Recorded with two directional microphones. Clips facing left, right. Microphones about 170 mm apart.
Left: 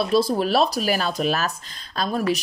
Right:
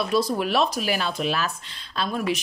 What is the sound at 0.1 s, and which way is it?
A woman's voice, 30° left (ahead or behind).